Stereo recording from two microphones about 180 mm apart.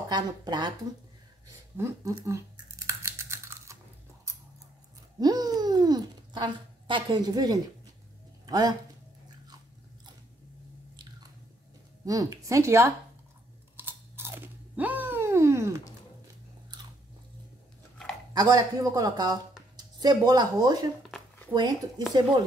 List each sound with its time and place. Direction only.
0.1 s speech: 25° right (ahead or behind)
1.8 s typing: 20° right (ahead or behind)
5.2 s a child's voice: 20° right (ahead or behind)
12.0 s speech: 20° right (ahead or behind)
13.7 s crunch: 10° right (ahead or behind)
18.3 s speech: 20° right (ahead or behind)